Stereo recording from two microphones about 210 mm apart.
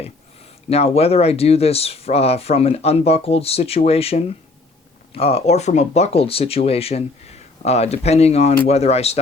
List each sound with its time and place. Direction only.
0.7 s speech: 30° left (ahead or behind)